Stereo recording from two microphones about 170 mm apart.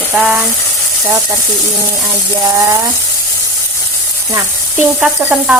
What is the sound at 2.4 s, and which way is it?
Frying, 20° right (ahead or behind).